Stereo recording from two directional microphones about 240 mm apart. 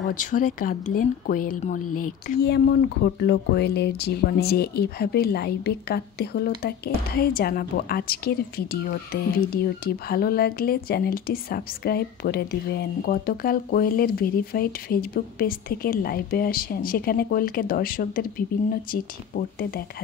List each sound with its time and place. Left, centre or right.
0.1 s a woman's voice: left
1.9 s speech: left
2.2 s a woman's voice: left